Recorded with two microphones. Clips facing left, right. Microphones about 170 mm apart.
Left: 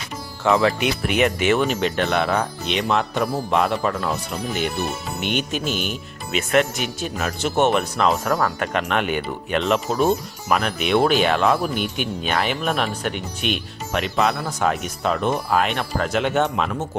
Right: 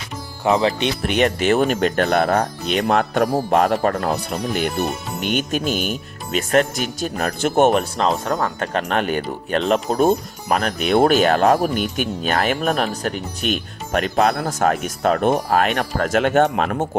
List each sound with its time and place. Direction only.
0.4 s speech: 20° right (ahead or behind); by 1.6 s 35° right (ahead or behind)
1.6 s speech: 50° right (ahead or behind)
2.8 s speech: 55° right (ahead or behind)
5.2 s speech: 45° right (ahead or behind)
8.2 s speech: 20° right (ahead or behind); by 16.9 s 55° right (ahead or behind)